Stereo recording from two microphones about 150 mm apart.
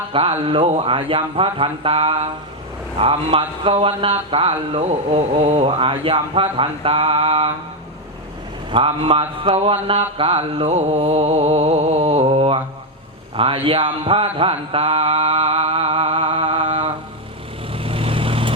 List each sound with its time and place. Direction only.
0.1 s speech: 35° right (ahead or behind)
8.7 s speech: 35° right (ahead or behind)
10.2 s mantra: 40° right (ahead or behind)
13.3 s speech: 35° right (ahead or behind)
17.7 s vehicle: 40° right (ahead or behind)